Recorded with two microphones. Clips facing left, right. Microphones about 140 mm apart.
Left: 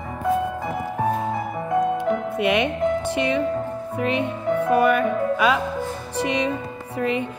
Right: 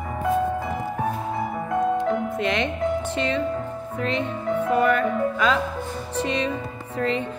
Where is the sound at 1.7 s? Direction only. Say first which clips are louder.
Left 1 dB; 10° left (ahead or behind).